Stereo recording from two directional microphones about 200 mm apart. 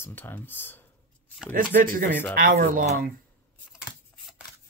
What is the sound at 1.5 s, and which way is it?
Speech, 45° right (ahead or behind).